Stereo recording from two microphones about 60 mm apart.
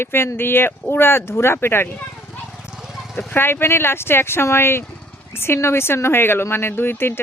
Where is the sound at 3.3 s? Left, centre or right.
Left.